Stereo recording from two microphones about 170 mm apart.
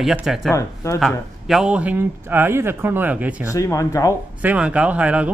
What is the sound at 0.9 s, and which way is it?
Speech, centre (ahead or behind).